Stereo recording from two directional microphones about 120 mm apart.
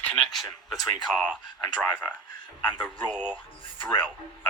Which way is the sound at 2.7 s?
15° left (ahead or behind).